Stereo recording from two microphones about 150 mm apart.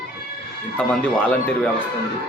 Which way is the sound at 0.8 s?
5° left (ahead or behind).